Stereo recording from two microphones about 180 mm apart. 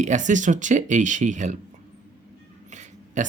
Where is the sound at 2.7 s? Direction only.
40° right (ahead or behind).